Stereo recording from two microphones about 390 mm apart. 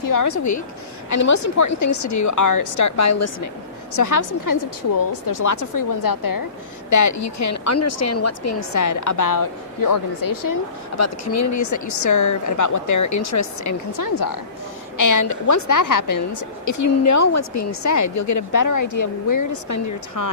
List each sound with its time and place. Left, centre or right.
0.0 s a woman's voice: left
11.0 s a woman's voice: left